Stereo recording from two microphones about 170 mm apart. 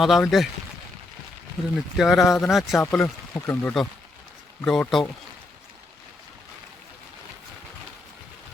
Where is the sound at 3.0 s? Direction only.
15° left (ahead or behind).